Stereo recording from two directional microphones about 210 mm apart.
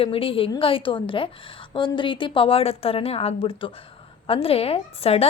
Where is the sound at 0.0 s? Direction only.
25° left (ahead or behind).